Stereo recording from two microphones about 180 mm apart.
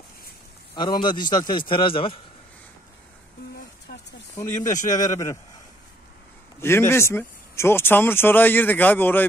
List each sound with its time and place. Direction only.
0.7 s a man's voice: 25° left (ahead or behind)
3.9 s a sound: 60° left (ahead or behind)
4.6 s a man's voice: 20° left (ahead or behind)
6.6 s speech: 15° left (ahead or behind)